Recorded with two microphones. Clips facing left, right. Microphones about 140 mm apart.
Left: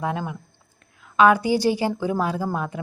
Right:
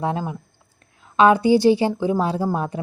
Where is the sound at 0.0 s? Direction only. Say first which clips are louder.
Right 3 dB; 30° right (ahead or behind).